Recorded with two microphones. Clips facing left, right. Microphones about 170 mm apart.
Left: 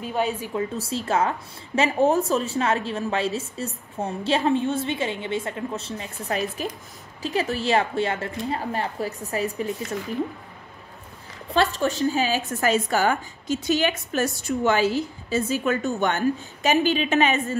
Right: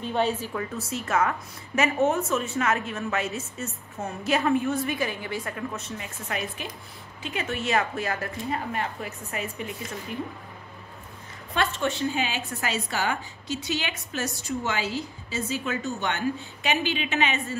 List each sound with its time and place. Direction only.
0.0 s a woman's voice: 10° left (ahead or behind)
0.5 s a woman's voice: 25° left (ahead or behind)
11.5 s a woman's voice: 35° left (ahead or behind)